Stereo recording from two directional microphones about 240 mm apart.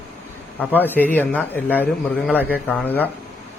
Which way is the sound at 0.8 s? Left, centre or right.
Centre.